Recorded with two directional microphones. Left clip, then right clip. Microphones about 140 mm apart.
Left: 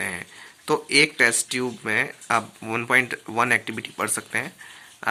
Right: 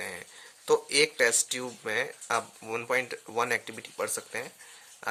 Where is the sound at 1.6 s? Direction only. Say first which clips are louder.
Left 7 dB; 35° right (ahead or behind).